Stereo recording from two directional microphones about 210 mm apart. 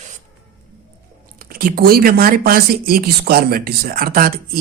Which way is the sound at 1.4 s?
45° right (ahead or behind).